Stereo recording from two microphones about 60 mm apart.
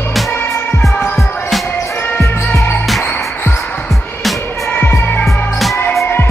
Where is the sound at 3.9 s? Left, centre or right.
Centre.